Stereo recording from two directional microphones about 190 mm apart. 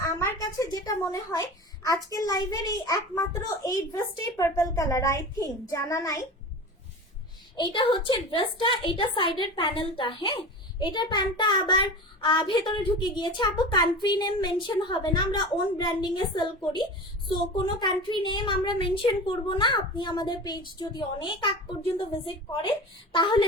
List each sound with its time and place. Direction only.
0.0 s a sound: 15° left (ahead or behind)
2.0 s a child's voice: 20° left (ahead or behind)
7.5 s a woman's voice: 25° left (ahead or behind)
23.1 s a woman's voice: 25° left (ahead or behind)